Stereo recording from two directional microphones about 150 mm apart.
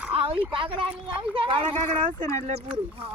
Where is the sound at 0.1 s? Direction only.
40° right (ahead or behind).